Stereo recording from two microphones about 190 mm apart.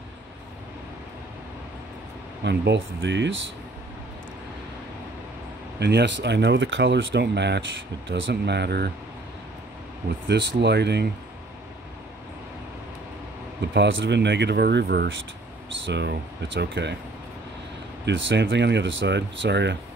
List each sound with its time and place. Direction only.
2.4 s speech: 65° right (ahead or behind)
5.8 s speech: 60° right (ahead or behind)
10.0 s speech: 65° right (ahead or behind)
13.6 s speech: 70° right (ahead or behind)
18.0 s speech: 70° right (ahead or behind)